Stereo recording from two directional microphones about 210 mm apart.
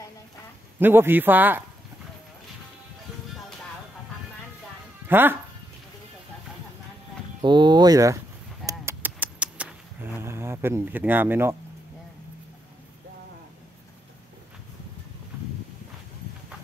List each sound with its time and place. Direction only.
0.7 s a man's voice: 10° right (ahead or behind)
5.0 s speech: 10° right (ahead or behind)
7.4 s speech: 20° right (ahead or behind)
8.6 s a sound: 10° right (ahead or behind)